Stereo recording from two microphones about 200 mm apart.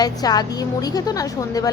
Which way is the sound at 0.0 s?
20° left (ahead or behind).